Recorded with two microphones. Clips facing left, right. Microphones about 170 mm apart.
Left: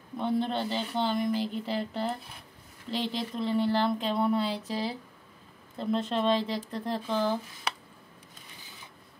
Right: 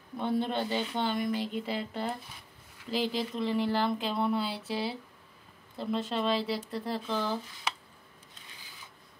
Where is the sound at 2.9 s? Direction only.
5° right (ahead or behind).